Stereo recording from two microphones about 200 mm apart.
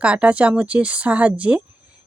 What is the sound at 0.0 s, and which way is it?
Speech, 5° right (ahead or behind).